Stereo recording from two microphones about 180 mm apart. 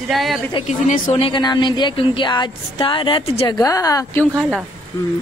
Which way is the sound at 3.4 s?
20° left (ahead or behind).